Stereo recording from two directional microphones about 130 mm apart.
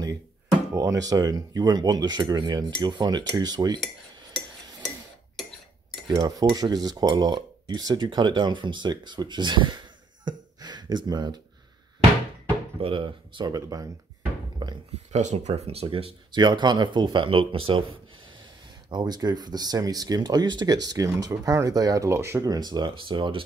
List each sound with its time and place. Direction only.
0.7 s speech: 25° right (ahead or behind)
4.8 s a sound: centre (ahead or behind)
6.0 s speech: 35° right (ahead or behind)
10.2 s gasp: 35° right (ahead or behind)
12.8 s speech: 40° right (ahead or behind)
13.5 s speech: 30° right (ahead or behind)
14.6 s a sound: 30° right (ahead or behind)
15.1 s speech: 60° right (ahead or behind); by 17.8 s 40° right (ahead or behind)
18.9 s speech: 35° right (ahead or behind)